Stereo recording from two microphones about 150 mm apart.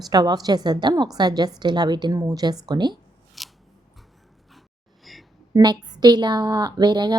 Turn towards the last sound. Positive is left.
turn(degrees=-30)  # may be behind; listen again after turning